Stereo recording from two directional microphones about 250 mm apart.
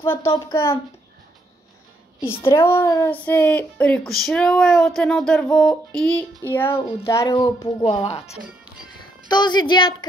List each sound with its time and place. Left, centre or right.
0.0 s speech: centre
2.2 s a woman's voice: centre